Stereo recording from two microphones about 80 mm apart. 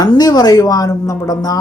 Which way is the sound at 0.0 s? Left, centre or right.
Left.